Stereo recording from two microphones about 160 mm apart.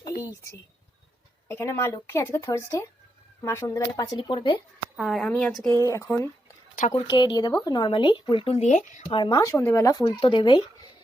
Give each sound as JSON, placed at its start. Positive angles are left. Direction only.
{"t": 1.5, "sound": "speech", "side_deg": 15}
{"t": 4.9, "sound": "speech", "side_deg": 0}
{"t": 5.9, "sound": "speech", "side_deg": 15}
{"t": 6.9, "sound": "speech", "side_deg": 30}
{"t": 8.6, "sound": "speech", "side_deg": 50}
{"t": 9.0, "sound": "speech", "side_deg": 30}
{"t": 10.0, "sound": "speech", "side_deg": 35}